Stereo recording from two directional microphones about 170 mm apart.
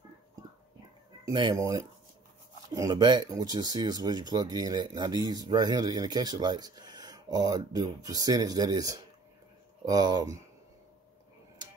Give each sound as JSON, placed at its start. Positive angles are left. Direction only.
{"t": 1.2, "sound": "speech", "side_deg": -25}